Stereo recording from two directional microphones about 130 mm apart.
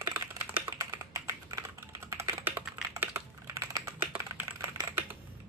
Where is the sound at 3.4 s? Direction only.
25° right (ahead or behind).